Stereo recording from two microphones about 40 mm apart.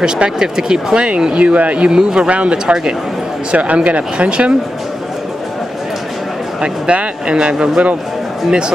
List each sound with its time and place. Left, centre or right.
0.0 s speech: centre; by 1.9 s right
1.9 s speech: right
3.5 s speech: right
6.6 s speech: right